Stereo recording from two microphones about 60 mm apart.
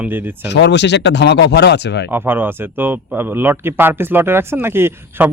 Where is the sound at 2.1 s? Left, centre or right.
Right.